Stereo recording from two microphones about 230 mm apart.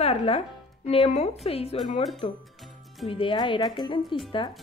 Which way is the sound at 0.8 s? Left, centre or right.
Left.